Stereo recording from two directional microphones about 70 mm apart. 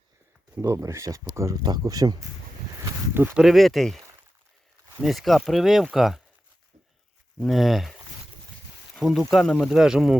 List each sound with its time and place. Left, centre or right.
0.6 s speech: right
1.5 s speech: right
1.8 s speech: right
3.3 s speech: centre
5.0 s speech: centre
7.3 s speech: centre
9.0 s speech: centre